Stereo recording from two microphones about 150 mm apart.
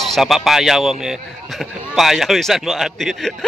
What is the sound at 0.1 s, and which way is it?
Speech, centre (ahead or behind).